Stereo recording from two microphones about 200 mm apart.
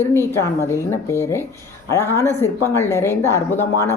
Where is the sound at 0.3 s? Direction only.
15° left (ahead or behind).